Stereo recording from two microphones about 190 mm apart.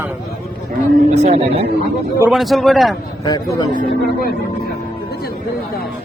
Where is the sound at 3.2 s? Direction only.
20° left (ahead or behind).